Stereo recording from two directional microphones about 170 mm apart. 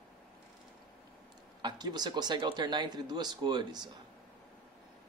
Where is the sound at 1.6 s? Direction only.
25° right (ahead or behind).